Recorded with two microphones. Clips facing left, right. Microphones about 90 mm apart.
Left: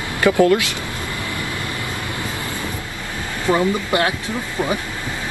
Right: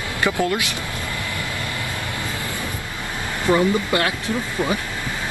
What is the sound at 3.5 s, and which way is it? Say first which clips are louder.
Speech: even; 20° left (ahead or behind).